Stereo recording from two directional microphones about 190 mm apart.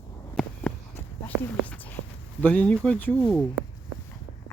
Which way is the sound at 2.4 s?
5° left (ahead or behind).